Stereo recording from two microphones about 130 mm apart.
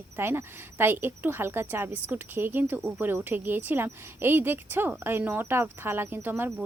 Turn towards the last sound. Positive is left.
turn(degrees=-15)  # may be behind; listen again after turning